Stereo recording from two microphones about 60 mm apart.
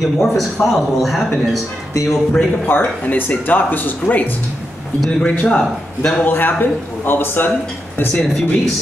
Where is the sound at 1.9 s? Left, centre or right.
Left.